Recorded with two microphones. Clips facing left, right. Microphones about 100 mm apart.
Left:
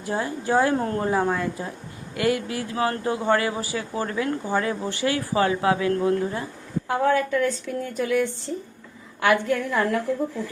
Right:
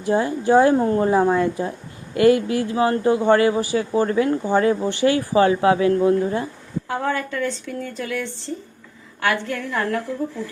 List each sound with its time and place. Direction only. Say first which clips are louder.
0.0 s speech: right 7 dB; 20° right (ahead or behind)
6.8 s a woman's voice: left 3 dB; 5° left (ahead or behind)